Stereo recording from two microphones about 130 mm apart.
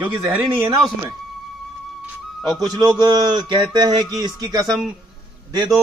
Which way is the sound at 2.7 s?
35° right (ahead or behind).